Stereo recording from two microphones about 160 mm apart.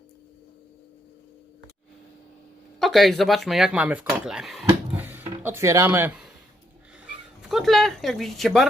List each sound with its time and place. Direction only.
2.7 s speech: centre (ahead or behind)
4.9 s a sound: 10° right (ahead or behind)
5.4 s speech: 15° right (ahead or behind)
7.0 s speech: centre (ahead or behind)